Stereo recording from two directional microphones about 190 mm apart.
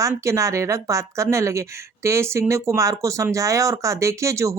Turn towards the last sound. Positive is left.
turn(degrees=-15)  # may be behind; listen again after turning